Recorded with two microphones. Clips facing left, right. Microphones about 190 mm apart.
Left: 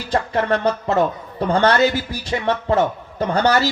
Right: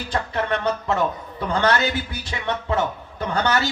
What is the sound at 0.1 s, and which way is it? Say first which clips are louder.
Speech: left 5 dB; 30° left (ahead or behind).